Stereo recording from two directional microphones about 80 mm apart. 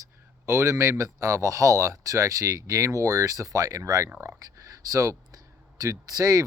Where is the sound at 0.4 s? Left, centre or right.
Right.